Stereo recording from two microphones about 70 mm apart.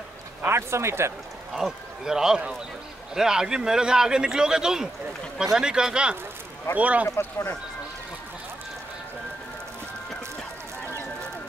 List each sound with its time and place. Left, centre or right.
0.5 s speech: right
1.5 s speech: centre
7.2 s speech: left